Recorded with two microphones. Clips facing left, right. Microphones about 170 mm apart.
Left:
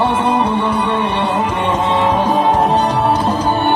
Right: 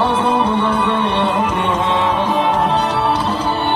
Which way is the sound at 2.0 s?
45° left (ahead or behind).